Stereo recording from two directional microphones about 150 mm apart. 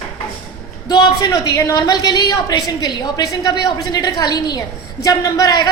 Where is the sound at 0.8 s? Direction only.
25° left (ahead or behind).